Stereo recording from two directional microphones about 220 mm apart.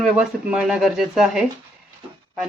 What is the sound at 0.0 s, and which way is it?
Speech, 5° right (ahead or behind).